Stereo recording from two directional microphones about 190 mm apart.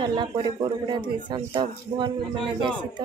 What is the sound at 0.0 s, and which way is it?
Speech, 25° right (ahead or behind).